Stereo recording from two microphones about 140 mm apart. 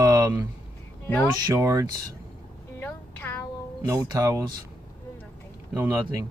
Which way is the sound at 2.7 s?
15° left (ahead or behind).